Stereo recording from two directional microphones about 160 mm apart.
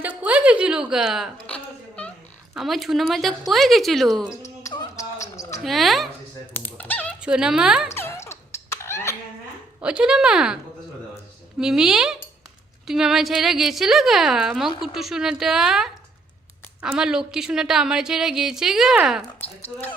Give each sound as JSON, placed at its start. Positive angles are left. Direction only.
{"t": 0.0, "sound": "a sound", "side_deg": -10}
{"t": 2.6, "sound": "a woman's voice", "side_deg": 0}
{"t": 4.9, "sound": "basketball bounce", "side_deg": 20}
{"t": 5.6, "sound": "a woman's voice", "side_deg": 0}
{"t": 6.5, "sound": "dog", "side_deg": 10}
{"t": 7.2, "sound": "a woman's voice", "side_deg": -5}
{"t": 7.9, "sound": "music", "side_deg": 15}
{"t": 9.8, "sound": "a woman's voice", "side_deg": -5}
{"t": 11.6, "sound": "a woman's voice", "side_deg": -5}
{"t": 19.4, "sound": "speech", "side_deg": 10}